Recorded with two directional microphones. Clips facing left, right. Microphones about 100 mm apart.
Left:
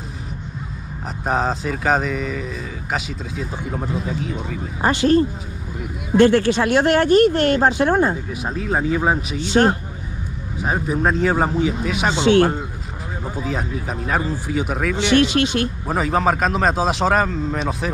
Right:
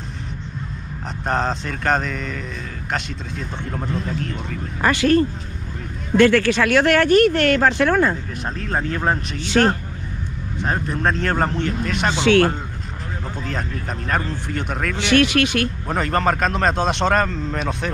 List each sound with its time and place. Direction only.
1.2 s speech: 5° left (ahead or behind)
4.8 s speech: 20° left (ahead or behind)
8.5 s speech: 5° left (ahead or behind)
9.5 s speech: 20° left (ahead or behind)
10.6 s speech: 5° left (ahead or behind)
12.1 s speech: 20° left (ahead or behind)
13.4 s speech: 5° left (ahead or behind)
15.0 s speech: 20° left (ahead or behind)
15.9 s speech: 5° left (ahead or behind)